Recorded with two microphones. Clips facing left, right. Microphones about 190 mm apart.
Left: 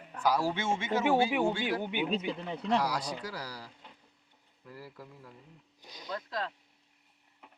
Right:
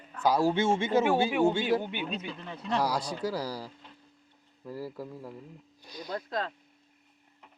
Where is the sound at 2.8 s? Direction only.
30° right (ahead or behind).